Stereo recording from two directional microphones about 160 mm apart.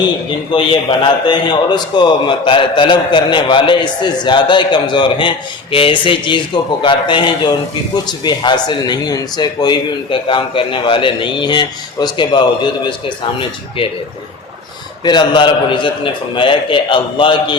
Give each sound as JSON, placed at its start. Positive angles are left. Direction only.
{"t": 0.5, "sound": "a man's voice", "side_deg": 30}
{"t": 15.0, "sound": "a man's voice", "side_deg": 30}